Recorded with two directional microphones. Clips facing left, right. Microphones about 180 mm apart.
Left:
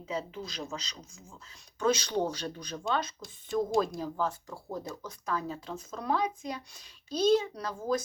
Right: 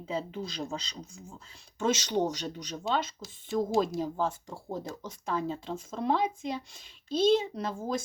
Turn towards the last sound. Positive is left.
turn(degrees=-25)  # may be behind; listen again after turning